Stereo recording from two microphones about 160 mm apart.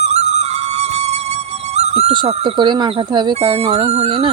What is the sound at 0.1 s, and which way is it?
Music, 45° right (ahead or behind).